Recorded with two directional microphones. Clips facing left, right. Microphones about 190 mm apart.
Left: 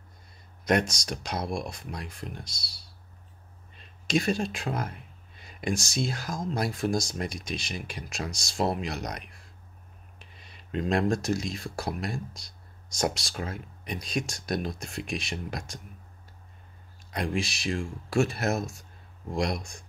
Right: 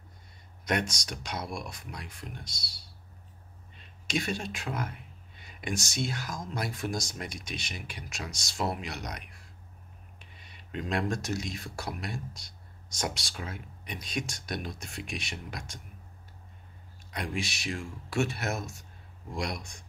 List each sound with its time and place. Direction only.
0.7 s speech: 35° left (ahead or behind)
4.1 s speech: 35° left (ahead or behind)
10.7 s speech: 35° left (ahead or behind)
17.1 s speech: 30° left (ahead or behind)